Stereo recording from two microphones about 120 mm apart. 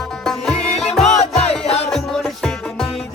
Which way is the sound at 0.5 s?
60° left (ahead or behind).